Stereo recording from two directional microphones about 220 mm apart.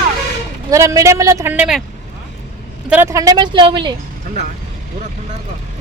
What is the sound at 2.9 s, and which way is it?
Speech, 10° right (ahead or behind).